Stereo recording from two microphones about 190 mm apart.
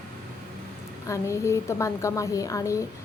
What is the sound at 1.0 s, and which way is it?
A woman's voice, 15° left (ahead or behind).